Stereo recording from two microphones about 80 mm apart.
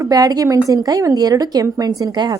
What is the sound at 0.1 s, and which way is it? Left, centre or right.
Speech, right.